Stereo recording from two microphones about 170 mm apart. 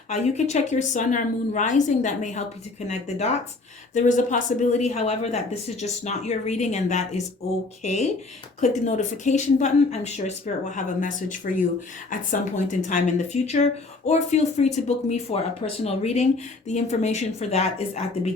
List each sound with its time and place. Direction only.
0.1 s speech: 40° left (ahead or behind)
8.6 s speech: 45° left (ahead or behind)